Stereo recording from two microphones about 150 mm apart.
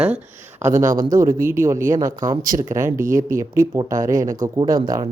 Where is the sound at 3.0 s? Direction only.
60° right (ahead or behind).